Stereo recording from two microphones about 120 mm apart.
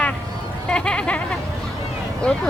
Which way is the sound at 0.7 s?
10° left (ahead or behind).